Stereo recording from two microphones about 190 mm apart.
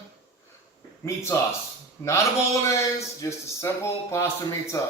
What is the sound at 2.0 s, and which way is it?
A man's voice, 15° left (ahead or behind).